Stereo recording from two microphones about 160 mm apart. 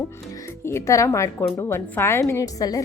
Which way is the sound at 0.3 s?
15° left (ahead or behind).